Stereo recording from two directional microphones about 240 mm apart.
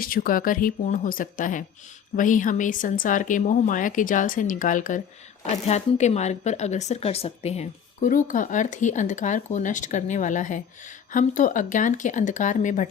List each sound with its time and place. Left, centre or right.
0.0 s speech: left